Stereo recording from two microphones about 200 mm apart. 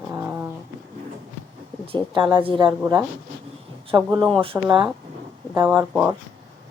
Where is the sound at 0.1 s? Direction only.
10° right (ahead or behind).